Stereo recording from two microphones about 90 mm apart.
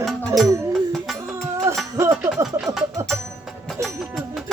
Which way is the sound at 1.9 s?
30° right (ahead or behind).